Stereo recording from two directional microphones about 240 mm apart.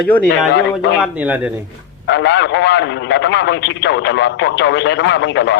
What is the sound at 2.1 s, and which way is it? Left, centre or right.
A man's voice, left.